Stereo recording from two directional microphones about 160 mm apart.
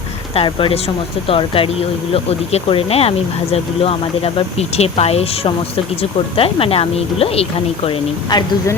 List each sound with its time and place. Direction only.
0.3 s speech: 35° left (ahead or behind)
7.9 s speech: 25° left (ahead or behind)